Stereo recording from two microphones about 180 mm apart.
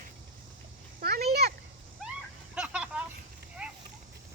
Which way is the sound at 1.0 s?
60° right (ahead or behind).